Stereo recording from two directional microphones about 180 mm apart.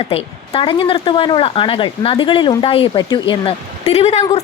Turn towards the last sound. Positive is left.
turn(degrees=35)  # may be behind; listen again after turning